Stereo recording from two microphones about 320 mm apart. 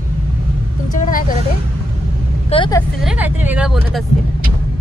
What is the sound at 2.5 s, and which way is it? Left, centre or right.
Speech, centre.